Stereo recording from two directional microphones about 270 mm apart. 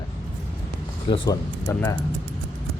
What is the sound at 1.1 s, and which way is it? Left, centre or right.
Speech, centre.